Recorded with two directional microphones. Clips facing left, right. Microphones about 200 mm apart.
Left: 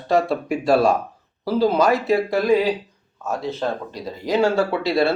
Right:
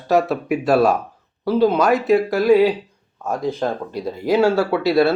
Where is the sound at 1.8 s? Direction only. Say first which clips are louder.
Right 3 dB; centre (ahead or behind).